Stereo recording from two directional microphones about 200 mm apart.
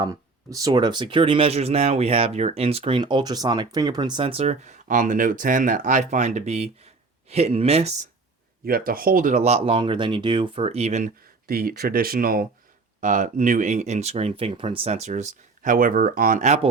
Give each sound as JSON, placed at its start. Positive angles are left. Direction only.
{"t": 0.0, "sound": "speech", "side_deg": -20}
{"t": 8.6, "sound": "speech", "side_deg": -45}